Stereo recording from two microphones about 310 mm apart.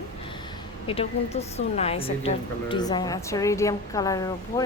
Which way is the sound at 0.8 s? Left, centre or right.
Centre.